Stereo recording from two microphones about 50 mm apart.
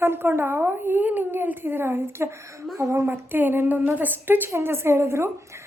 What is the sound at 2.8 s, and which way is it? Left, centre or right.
Speech, right.